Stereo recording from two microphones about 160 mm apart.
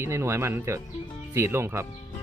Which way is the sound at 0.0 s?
15° right (ahead or behind).